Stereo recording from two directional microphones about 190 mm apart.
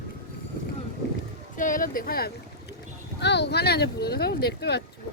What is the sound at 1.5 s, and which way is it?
Speech, 45° left (ahead or behind).